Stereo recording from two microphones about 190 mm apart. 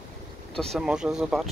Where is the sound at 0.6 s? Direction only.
Centre (ahead or behind).